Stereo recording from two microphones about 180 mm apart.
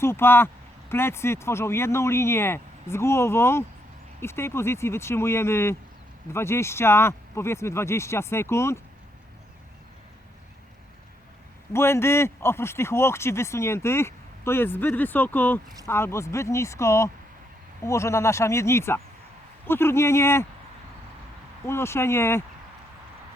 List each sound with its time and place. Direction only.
0.0 s speech: 15° left (ahead or behind)
11.7 s speech: 15° left (ahead or behind)
21.7 s speech: 15° left (ahead or behind)